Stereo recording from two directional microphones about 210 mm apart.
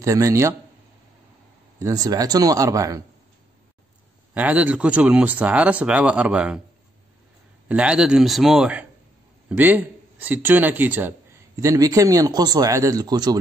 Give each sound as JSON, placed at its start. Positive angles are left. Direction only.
{"t": 0.0, "sound": "speech", "side_deg": -15}
{"t": 1.8, "sound": "speech", "side_deg": -15}
{"t": 4.3, "sound": "speech", "side_deg": -5}
{"t": 7.6, "sound": "a man's voice", "side_deg": -5}